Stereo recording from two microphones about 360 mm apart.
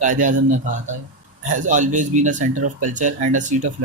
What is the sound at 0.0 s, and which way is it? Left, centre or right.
Speech, right.